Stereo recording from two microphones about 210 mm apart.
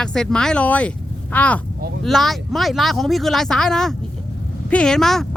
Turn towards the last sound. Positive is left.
turn(degrees=0)  # may be behind; listen again after turning